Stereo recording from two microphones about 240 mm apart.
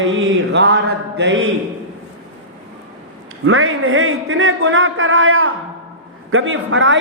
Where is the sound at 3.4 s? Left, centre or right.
Right.